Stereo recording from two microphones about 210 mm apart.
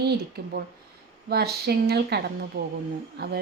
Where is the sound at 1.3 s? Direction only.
50° right (ahead or behind).